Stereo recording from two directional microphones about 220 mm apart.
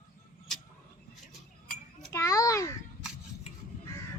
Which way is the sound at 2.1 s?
15° left (ahead or behind).